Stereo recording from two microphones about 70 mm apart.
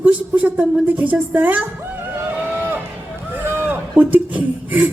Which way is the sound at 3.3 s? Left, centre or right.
Right.